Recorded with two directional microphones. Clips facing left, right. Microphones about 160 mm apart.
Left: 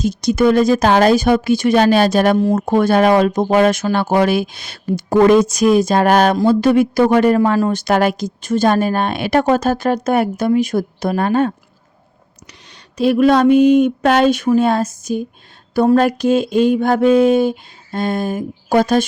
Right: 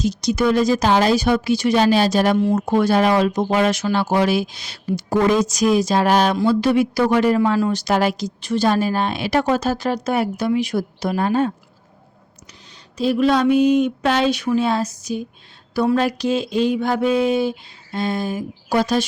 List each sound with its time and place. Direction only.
0.0 s speech: 50° left (ahead or behind)